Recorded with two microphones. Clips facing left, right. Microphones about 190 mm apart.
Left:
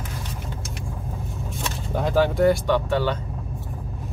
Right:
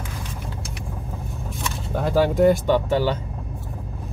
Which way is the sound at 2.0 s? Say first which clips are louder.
Right 2 dB; 10° right (ahead or behind).